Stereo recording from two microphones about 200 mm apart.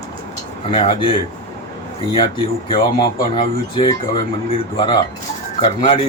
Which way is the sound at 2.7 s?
25° left (ahead or behind).